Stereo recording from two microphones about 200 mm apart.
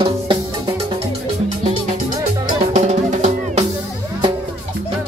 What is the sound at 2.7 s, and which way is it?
Music, 35° right (ahead or behind).